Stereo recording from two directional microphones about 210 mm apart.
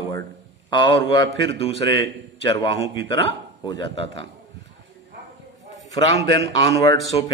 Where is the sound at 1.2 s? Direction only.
60° right (ahead or behind).